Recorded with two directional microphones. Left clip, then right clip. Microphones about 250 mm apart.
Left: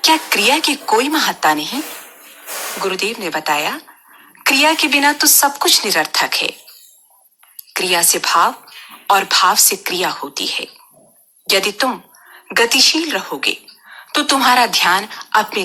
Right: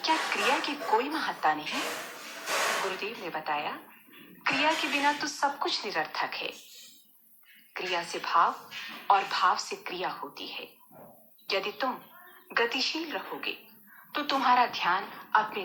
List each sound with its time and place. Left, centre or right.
0.0 s speech: left
2.9 s speech: left
7.7 s speech: left